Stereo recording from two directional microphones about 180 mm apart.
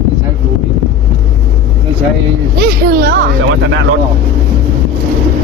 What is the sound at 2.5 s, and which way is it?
Speech, 60° right (ahead or behind).